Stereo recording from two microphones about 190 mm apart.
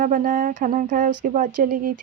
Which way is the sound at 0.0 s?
45° right (ahead or behind).